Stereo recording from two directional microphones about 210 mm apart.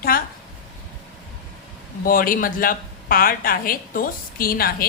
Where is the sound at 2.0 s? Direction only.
40° left (ahead or behind).